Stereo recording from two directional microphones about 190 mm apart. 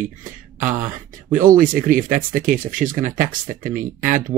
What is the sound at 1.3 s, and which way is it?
Speech, 45° right (ahead or behind).